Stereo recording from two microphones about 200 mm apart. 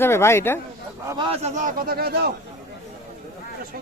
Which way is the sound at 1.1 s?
25° right (ahead or behind).